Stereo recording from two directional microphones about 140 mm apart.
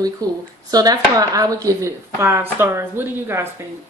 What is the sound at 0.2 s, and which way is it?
Speech, 25° right (ahead or behind).